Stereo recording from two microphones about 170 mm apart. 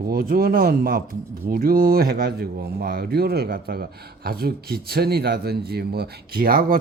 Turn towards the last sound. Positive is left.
turn(degrees=-60)  # may be behind; listen again after turning